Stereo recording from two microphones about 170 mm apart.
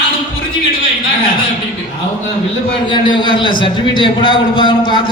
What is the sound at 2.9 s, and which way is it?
A man's voice, 30° left (ahead or behind).